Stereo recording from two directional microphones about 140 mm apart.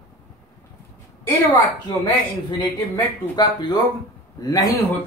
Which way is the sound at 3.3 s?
30° left (ahead or behind).